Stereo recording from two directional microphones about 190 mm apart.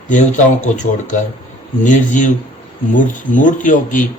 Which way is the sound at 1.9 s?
40° left (ahead or behind).